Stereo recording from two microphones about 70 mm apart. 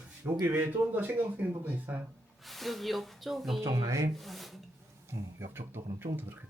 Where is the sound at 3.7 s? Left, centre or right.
Right.